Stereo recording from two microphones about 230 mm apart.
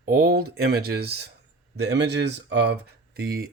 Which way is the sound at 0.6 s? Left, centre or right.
Right.